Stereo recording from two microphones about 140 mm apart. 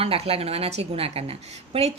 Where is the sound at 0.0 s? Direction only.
45° right (ahead or behind).